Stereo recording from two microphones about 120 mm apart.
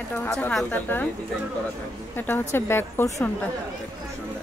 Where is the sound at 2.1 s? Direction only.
20° left (ahead or behind).